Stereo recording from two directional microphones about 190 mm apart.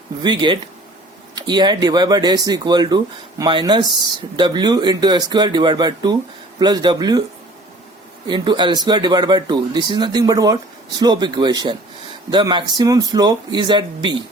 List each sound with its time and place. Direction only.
0.2 s speech: 25° right (ahead or behind)
8.3 s speech: 20° right (ahead or behind)